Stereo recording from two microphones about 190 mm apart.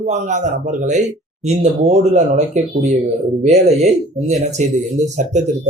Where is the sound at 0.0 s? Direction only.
40° right (ahead or behind).